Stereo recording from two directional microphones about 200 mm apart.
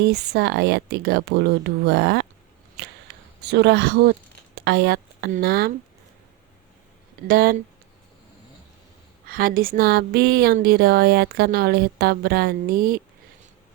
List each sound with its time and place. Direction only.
0.0 s speech: 55° right (ahead or behind)
2.8 s a sound: 55° right (ahead or behind)
3.4 s speech: 55° right (ahead or behind)
4.5 s a sound: 55° right (ahead or behind)
5.3 s speech: 50° right (ahead or behind)
7.3 s speech: 45° right (ahead or behind)
9.2 s speech: 45° right (ahead or behind)